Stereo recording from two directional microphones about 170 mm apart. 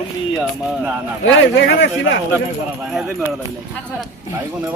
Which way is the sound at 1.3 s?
90° left.